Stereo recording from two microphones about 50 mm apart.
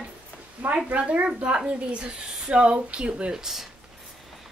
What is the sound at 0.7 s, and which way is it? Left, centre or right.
Speech, right.